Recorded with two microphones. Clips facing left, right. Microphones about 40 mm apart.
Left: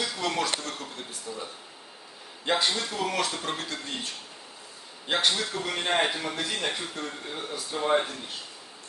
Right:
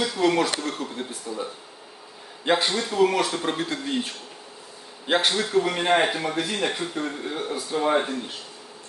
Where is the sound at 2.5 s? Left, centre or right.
Right.